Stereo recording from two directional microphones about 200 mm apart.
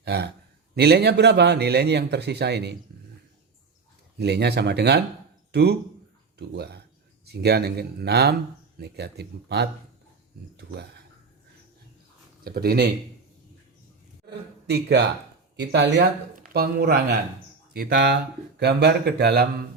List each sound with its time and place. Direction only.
0.0 s a man's voice: 55° right (ahead or behind)
4.2 s a man's voice: 55° right (ahead or behind)
12.5 s speech: 50° right (ahead or behind)
14.3 s a man's voice: 55° right (ahead or behind)
16.4 s a man's voice: 50° right (ahead or behind)